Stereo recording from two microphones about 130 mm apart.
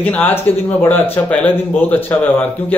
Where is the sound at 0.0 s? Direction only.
15° left (ahead or behind).